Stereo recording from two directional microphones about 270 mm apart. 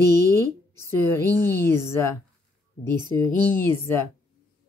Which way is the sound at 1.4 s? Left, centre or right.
Centre.